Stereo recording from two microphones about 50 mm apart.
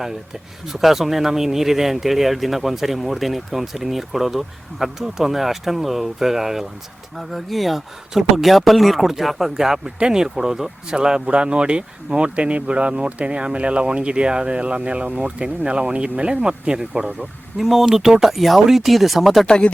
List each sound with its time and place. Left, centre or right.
0.7 s speech: centre
17.6 s speech: centre
19.5 s speech: centre